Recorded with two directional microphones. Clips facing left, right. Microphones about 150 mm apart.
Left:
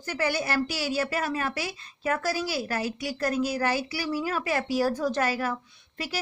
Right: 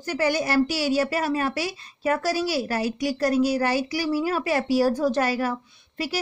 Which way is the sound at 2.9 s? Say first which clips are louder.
Right 8 dB; 35° right (ahead or behind).